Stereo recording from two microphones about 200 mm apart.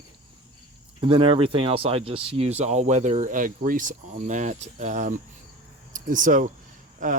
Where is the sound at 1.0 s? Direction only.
25° right (ahead or behind).